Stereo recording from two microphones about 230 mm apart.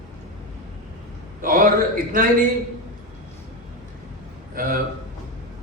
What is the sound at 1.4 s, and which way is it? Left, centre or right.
Speech, right.